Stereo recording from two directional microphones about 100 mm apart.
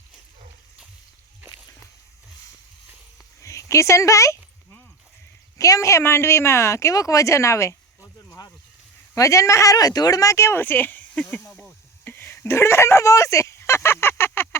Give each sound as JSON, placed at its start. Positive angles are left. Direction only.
{"t": 3.4, "sound": "speech", "side_deg": 30}
{"t": 5.5, "sound": "speech", "side_deg": 35}
{"t": 9.1, "sound": "speech", "side_deg": 30}
{"t": 12.0, "sound": "a sound", "side_deg": 20}